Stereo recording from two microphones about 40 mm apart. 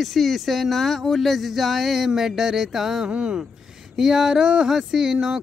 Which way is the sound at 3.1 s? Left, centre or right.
Right.